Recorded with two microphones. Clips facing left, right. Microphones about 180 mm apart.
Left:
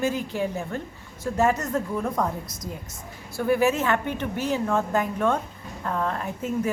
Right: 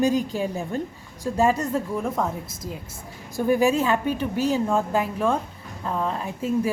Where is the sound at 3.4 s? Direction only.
15° right (ahead or behind).